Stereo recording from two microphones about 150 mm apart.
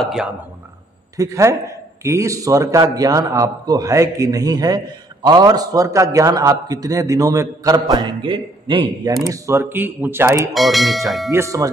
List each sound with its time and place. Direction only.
0.0 s speech: 5° right (ahead or behind)
1.1 s a man's voice: 20° right (ahead or behind)
9.3 s speech: 15° right (ahead or behind)
10.5 s speech: centre (ahead or behind)
11.3 s a man's voice: 20° right (ahead or behind)